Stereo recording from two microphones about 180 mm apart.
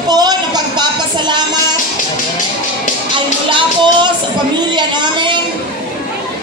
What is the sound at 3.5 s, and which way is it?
Music, 25° right (ahead or behind).